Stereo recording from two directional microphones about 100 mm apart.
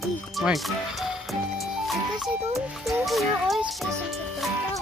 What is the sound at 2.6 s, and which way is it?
A child's voice, centre (ahead or behind).